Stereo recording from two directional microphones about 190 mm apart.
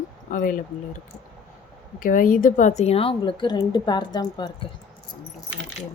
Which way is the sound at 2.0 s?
45° left (ahead or behind).